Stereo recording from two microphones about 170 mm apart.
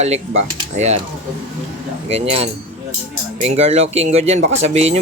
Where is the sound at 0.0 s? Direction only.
40° right (ahead or behind).